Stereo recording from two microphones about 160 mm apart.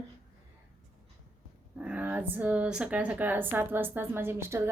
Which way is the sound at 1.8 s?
10° right (ahead or behind).